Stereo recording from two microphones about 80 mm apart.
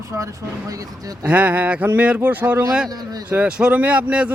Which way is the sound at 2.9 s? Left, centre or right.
Right.